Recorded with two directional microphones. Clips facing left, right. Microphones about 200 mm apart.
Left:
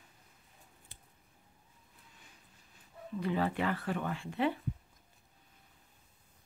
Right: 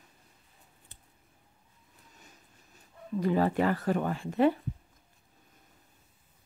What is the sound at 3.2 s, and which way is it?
Speech, 40° right (ahead or behind).